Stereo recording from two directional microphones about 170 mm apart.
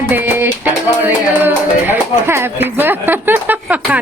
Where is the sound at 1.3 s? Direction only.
10° right (ahead or behind).